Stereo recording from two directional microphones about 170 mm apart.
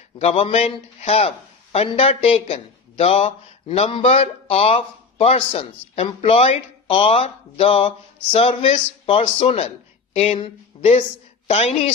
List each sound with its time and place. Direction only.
0.2 s a man's voice: 35° left (ahead or behind)